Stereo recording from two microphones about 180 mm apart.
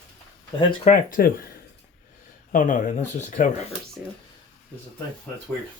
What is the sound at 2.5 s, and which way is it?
Speech, 45° left (ahead or behind).